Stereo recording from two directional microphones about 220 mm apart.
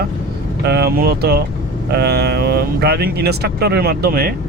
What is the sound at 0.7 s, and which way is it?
Speech, 45° right (ahead or behind).